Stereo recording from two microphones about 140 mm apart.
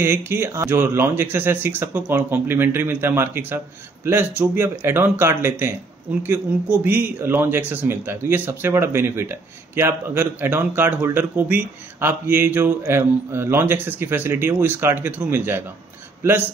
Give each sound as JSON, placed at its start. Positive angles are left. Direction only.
{"t": 0.0, "sound": "speech", "side_deg": -15}